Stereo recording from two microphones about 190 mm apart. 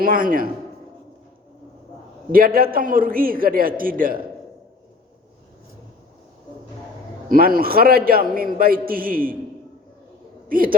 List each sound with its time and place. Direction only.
0.0 s a man's voice: 45° right (ahead or behind)
2.3 s a man's voice: 50° right (ahead or behind)
7.3 s a man's voice: 50° right (ahead or behind)
10.5 s a man's voice: 50° right (ahead or behind)